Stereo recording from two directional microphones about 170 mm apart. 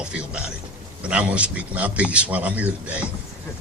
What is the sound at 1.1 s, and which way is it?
A man's voice, 5° right (ahead or behind).